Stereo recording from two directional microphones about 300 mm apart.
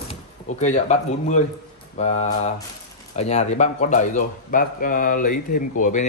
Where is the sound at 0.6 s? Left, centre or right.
Left.